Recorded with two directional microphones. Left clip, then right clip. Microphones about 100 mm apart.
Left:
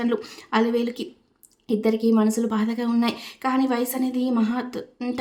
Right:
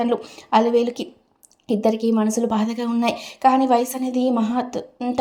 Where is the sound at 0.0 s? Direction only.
25° right (ahead or behind).